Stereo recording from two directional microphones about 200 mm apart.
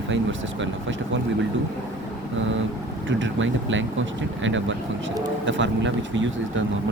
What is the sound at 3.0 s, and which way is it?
Speech, 70° right (ahead or behind).